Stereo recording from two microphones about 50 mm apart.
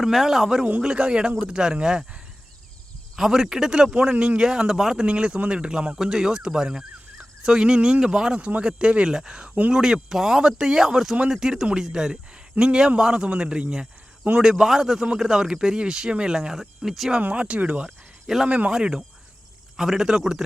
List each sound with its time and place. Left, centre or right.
0.0 s speech: centre
0.4 s speech: centre
4.1 s speech: right
4.4 s speech: centre
6.0 s speech: centre
17.3 s speech: right
17.8 s cricket: centre
18.4 s speech: right
18.7 s speech: centre